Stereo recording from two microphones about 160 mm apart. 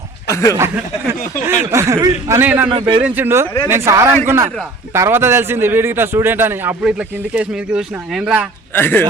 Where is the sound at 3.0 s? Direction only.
10° right (ahead or behind).